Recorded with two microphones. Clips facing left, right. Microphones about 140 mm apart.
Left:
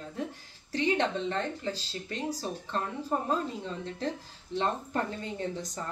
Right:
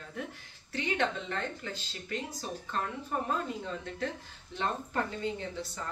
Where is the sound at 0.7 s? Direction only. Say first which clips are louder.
Left 4 dB; 30° left (ahead or behind).